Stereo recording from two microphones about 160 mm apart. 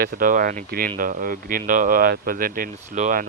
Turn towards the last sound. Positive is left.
turn(degrees=-55)  # may be behind; listen again after turning